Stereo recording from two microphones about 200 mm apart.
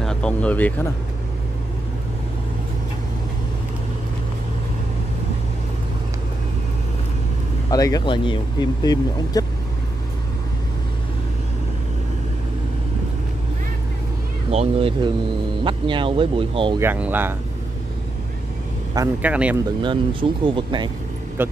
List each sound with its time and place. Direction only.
0.0 s speech: 5° left (ahead or behind)
7.7 s speech: 20° left (ahead or behind)
14.5 s speech: 30° right (ahead or behind)
16.8 s speech: 10° right (ahead or behind)
19.2 s speech: 5° right (ahead or behind)
19.8 s speech: 25° right (ahead or behind)
21.4 s speech: 10° right (ahead or behind)